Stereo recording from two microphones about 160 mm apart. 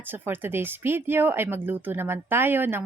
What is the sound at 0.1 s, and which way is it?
A woman's voice, 15° right (ahead or behind).